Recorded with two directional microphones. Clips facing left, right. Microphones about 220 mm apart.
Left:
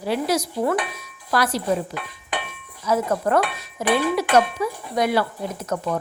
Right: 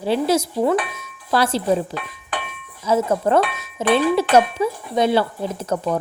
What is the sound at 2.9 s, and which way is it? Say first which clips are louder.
Speech: right 3 dB; 25° right (ahead or behind).